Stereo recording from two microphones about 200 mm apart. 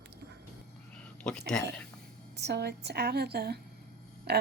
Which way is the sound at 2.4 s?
55° right (ahead or behind).